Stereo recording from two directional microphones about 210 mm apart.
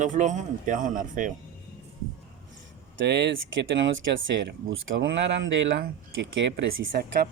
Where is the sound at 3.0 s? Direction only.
55° right (ahead or behind).